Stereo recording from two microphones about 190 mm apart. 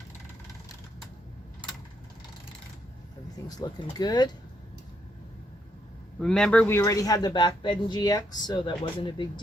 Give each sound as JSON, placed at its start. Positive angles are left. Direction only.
{"t": 3.9, "sound": "speech", "side_deg": 20}
{"t": 6.1, "sound": "speech", "side_deg": 5}